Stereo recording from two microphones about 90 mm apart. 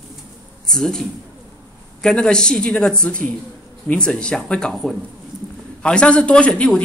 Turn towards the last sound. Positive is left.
turn(degrees=15)  # may be behind; listen again after turning